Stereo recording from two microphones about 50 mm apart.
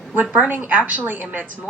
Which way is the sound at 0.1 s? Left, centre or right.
Right.